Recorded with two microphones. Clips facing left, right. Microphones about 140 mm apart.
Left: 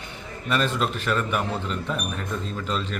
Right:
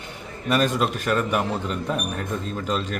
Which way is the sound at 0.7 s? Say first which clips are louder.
Right 2 dB; 10° right (ahead or behind).